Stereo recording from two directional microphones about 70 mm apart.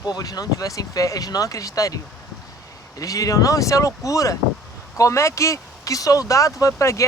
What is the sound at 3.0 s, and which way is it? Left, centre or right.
Speech, left.